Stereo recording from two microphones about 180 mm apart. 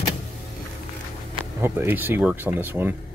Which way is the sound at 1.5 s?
10° right (ahead or behind).